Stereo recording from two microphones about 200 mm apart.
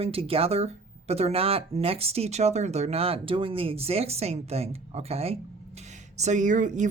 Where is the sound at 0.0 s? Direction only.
30° right (ahead or behind).